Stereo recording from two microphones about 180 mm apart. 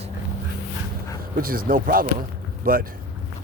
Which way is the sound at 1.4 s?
55° right (ahead or behind).